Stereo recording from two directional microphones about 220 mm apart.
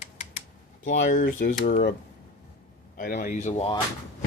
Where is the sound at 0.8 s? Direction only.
35° left (ahead or behind).